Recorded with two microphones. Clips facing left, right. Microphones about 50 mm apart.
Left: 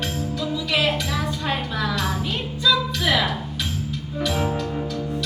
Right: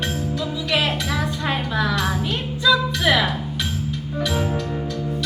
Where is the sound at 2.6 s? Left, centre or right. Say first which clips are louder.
Right 3 dB; centre.